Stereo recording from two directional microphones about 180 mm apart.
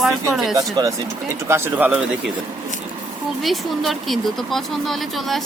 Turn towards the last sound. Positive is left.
turn(degrees=0)  # may be behind; listen again after turning